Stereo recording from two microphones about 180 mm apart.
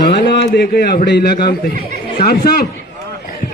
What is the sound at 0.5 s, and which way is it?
Speech, 60° left (ahead or behind).